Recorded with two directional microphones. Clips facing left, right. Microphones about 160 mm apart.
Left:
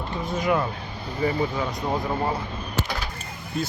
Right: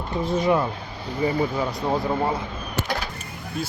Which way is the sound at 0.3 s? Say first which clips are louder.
Right 2 dB; 25° right (ahead or behind).